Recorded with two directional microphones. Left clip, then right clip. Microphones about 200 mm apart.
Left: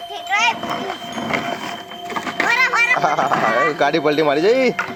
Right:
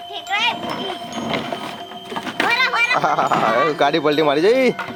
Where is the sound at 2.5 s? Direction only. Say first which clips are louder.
Left 2 dB; 15° left (ahead or behind).